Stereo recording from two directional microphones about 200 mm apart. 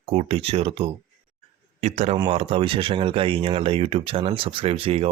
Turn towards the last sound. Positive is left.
turn(degrees=-30)  # may be behind; listen again after turning